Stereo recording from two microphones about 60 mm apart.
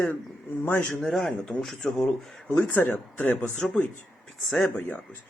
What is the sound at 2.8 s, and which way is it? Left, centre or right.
Speech, left.